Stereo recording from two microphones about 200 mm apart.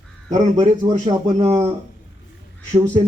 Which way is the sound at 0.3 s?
35° right (ahead or behind).